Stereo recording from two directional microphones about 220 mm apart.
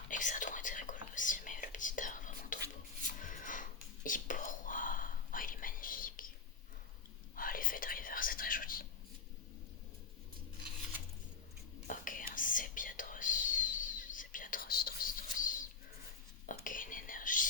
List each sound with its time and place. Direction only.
0.1 s whispering: 35° left (ahead or behind)
7.3 s whispering: 40° left (ahead or behind)
11.9 s whispering: 40° left (ahead or behind)
16.6 s whispering: 40° left (ahead or behind)